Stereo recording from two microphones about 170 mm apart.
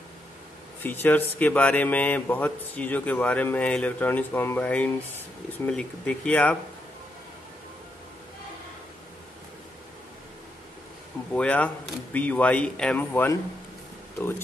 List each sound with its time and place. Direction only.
0.8 s speech: 10° left (ahead or behind)
11.3 s speech: 5° left (ahead or behind)